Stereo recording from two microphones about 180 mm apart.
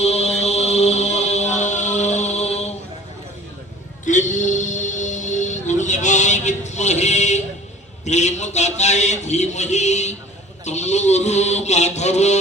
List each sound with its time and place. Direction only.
0.0 s mantra: 35° left (ahead or behind)
4.0 s music: 45° left (ahead or behind)
8.0 s a sound: 40° left (ahead or behind)